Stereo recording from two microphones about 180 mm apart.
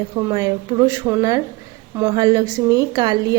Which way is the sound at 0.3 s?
20° right (ahead or behind).